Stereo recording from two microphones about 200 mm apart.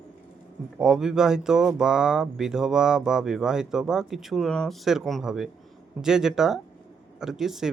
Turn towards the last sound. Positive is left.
turn(degrees=0)  # may be behind; listen again after turning